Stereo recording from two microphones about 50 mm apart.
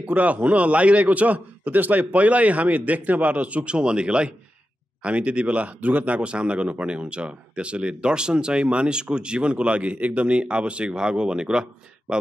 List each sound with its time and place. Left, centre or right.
0.0 s speech: right
6.1 s speech: right